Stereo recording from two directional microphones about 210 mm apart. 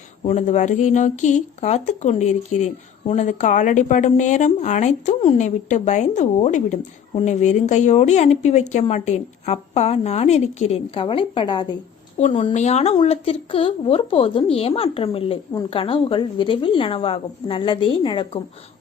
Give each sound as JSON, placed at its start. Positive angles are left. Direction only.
{"t": 0.3, "sound": "a woman's voice", "side_deg": 35}